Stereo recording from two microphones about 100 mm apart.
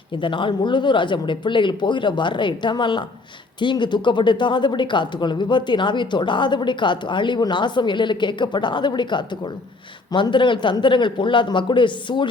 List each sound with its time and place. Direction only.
0.2 s speech: 55° left (ahead or behind)